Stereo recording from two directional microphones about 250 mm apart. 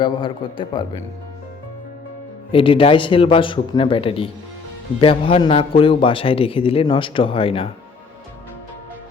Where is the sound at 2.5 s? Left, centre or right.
Left.